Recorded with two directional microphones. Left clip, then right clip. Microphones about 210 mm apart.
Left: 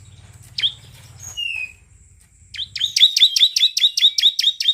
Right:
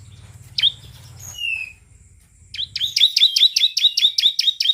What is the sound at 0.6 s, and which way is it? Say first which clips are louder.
Chirp: right 3 dB; centre (ahead or behind).